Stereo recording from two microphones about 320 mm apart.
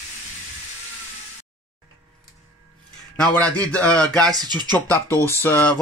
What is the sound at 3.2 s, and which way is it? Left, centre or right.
Speech, centre.